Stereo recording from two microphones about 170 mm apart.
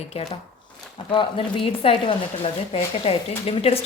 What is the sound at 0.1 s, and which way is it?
A woman's voice, 35° left (ahead or behind).